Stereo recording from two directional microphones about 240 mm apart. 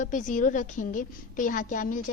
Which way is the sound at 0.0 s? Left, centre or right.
Left.